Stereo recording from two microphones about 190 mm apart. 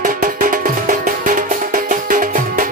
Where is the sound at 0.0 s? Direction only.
45° right (ahead or behind).